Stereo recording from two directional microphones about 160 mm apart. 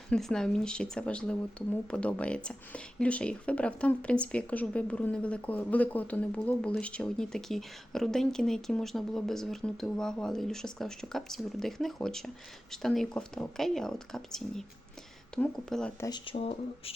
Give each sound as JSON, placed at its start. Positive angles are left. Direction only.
{"t": 0.1, "sound": "speech", "side_deg": 5}
{"t": 16.0, "sound": "speech", "side_deg": 30}